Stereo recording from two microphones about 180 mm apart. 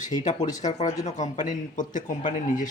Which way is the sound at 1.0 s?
40° left (ahead or behind).